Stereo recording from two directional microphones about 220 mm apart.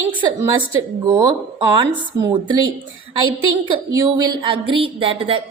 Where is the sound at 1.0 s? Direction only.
15° right (ahead or behind).